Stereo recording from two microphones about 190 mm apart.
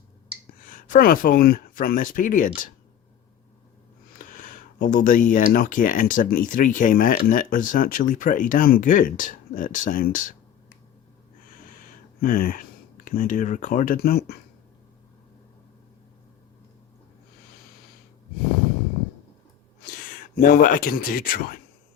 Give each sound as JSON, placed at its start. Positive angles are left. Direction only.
{"t": 0.7, "sound": "speech", "side_deg": 45}
{"t": 4.2, "sound": "speech", "side_deg": 50}
{"t": 12.2, "sound": "speech", "side_deg": 50}
{"t": 20.3, "sound": "speech", "side_deg": 50}